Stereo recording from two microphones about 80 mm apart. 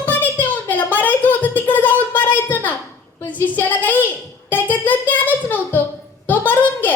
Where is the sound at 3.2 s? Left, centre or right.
Left.